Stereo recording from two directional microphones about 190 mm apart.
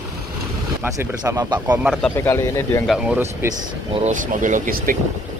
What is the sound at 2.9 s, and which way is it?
Speech, 5° right (ahead or behind).